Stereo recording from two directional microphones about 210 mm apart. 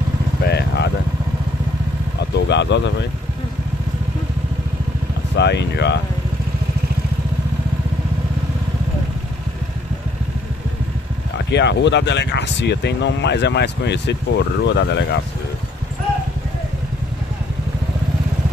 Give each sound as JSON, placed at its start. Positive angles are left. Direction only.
{"t": 0.5, "sound": "vehicle", "side_deg": 50}
{"t": 2.3, "sound": "speech", "side_deg": 55}
{"t": 5.3, "sound": "speech", "side_deg": 55}
{"t": 11.5, "sound": "speech", "side_deg": 55}